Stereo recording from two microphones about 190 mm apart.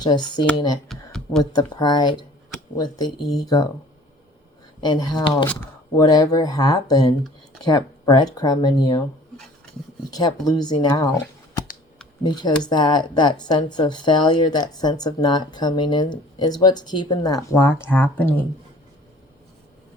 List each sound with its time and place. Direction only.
0.0 s speech: 20° left (ahead or behind)
0.9 s a sound: 5° left (ahead or behind)
1.4 s speech: 20° left (ahead or behind)
4.8 s speech: 20° left (ahead or behind)
10.1 s speech: 20° left (ahead or behind)